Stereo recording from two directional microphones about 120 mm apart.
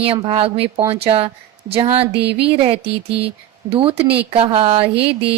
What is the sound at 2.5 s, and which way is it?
Speech, 55° right (ahead or behind).